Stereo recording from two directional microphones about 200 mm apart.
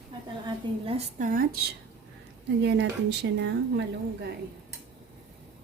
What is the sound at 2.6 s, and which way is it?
Speech, 60° right (ahead or behind).